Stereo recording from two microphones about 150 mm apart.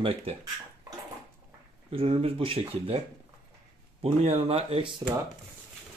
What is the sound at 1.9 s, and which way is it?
Speech, 40° right (ahead or behind).